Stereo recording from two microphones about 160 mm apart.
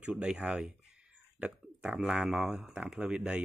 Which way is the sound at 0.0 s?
5° right (ahead or behind).